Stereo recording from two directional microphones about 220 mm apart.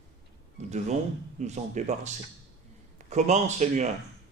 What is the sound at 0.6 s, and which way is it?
A man's voice, 30° right (ahead or behind).